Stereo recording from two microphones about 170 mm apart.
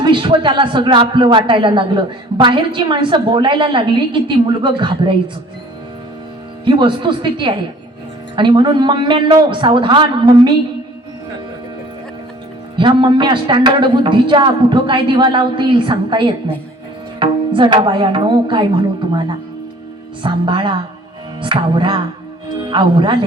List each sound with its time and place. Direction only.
0.0 s a man's voice: 30° right (ahead or behind)
6.7 s a man's voice: 30° right (ahead or behind)
12.7 s a man's voice: 30° right (ahead or behind)
20.2 s a man's voice: 30° right (ahead or behind)